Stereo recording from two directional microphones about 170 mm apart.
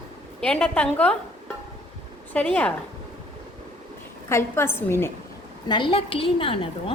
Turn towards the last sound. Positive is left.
turn(degrees=30)  # may be behind; listen again after turning